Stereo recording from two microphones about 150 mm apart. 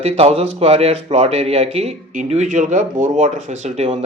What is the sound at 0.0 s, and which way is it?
Speech, 40° right (ahead or behind).